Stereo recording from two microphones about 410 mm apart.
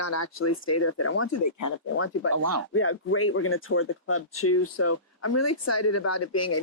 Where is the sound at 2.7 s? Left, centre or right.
Left.